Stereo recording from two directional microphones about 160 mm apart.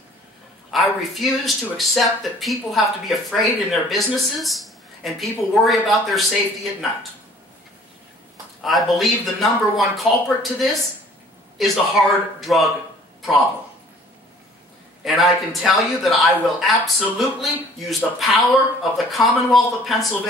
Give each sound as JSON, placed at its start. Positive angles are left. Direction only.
{"t": 0.7, "sound": "speech", "side_deg": 0}
{"t": 8.6, "sound": "speech", "side_deg": 0}
{"t": 15.0, "sound": "speech", "side_deg": 0}